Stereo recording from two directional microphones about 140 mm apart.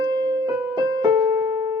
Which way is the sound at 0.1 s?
35° right (ahead or behind).